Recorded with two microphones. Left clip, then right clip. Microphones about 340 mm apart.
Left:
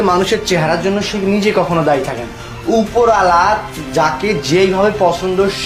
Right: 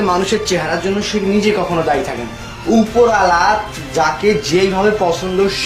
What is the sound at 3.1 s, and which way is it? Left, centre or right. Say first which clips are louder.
Speech: left 2 dB; left.